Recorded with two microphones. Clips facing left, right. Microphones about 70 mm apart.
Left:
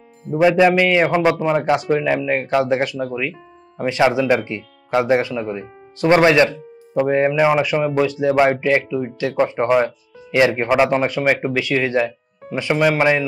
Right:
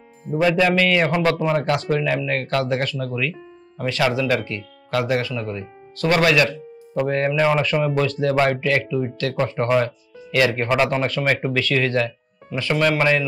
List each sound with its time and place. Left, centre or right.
0.3 s a man's voice: centre
6.9 s a man's voice: centre